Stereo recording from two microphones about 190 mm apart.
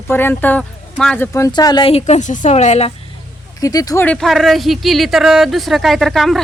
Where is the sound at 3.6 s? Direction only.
20° left (ahead or behind).